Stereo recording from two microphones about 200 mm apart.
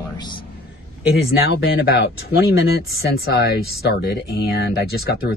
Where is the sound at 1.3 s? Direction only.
50° left (ahead or behind).